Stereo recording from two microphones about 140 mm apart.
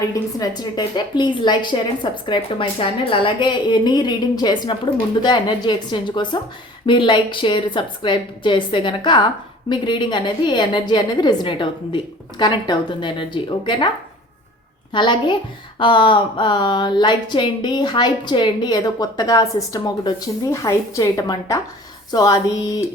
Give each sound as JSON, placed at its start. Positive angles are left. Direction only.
{"t": 0.0, "sound": "speech", "side_deg": 25}
{"t": 14.9, "sound": "speech", "side_deg": 35}
{"t": 22.1, "sound": "a sound", "side_deg": 25}